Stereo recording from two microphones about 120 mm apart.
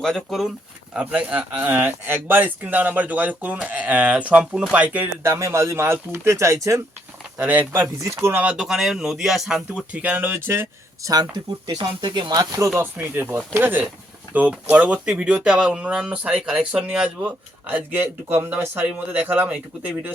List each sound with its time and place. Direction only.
0.0 s speech: centre (ahead or behind)
0.9 s speech: 10° right (ahead or behind)
7.9 s speech: 25° right (ahead or behind)
8.5 s speech: 5° right (ahead or behind); by 11.1 s 20° right (ahead or behind)
11.1 s speech: 35° right (ahead or behind); by 20.1 s 15° right (ahead or behind)